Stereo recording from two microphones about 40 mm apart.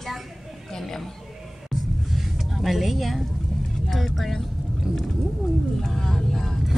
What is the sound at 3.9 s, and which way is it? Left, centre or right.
Speech, centre.